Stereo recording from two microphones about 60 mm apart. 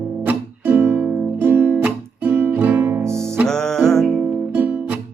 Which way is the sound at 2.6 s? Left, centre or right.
Right.